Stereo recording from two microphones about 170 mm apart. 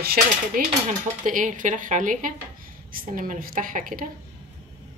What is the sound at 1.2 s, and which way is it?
Speech, 50° right (ahead or behind).